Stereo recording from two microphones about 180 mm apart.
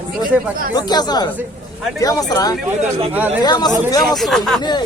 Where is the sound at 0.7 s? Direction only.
20° left (ahead or behind).